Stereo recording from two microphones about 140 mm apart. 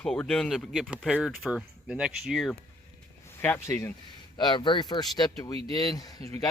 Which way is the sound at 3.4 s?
15° left (ahead or behind).